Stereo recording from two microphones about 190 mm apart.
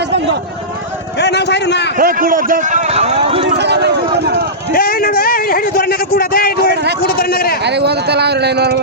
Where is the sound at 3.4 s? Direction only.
65° right (ahead or behind).